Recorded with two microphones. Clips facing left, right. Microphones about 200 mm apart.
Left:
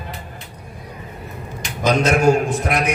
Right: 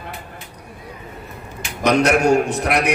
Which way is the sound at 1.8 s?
70° right (ahead or behind).